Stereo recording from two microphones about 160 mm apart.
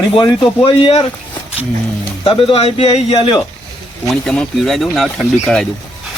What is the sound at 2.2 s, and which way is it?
A man's voice, 35° left (ahead or behind).